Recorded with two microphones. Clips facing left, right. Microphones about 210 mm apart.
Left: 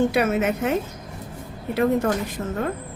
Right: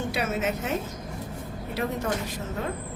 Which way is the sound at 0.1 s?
60° left (ahead or behind).